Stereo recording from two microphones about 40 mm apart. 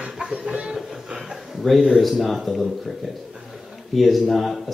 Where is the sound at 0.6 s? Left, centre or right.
Centre.